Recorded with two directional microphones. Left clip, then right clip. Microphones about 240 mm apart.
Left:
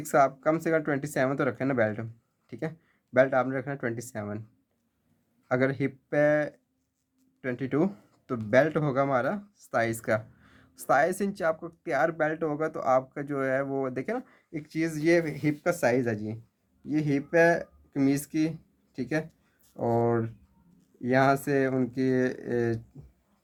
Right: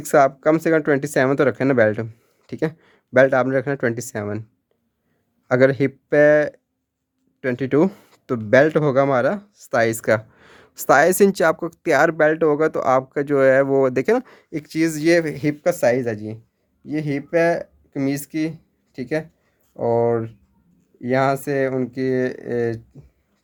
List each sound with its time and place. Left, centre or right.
0.0 s speech: right
5.5 s speech: right